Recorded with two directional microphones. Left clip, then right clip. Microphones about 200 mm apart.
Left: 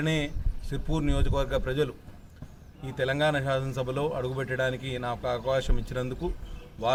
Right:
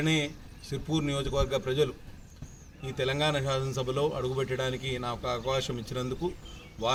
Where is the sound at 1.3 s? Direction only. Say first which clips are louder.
Even; 20° left (ahead or behind).